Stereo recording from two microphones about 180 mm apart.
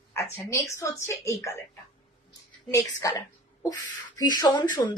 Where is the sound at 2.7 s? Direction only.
15° left (ahead or behind).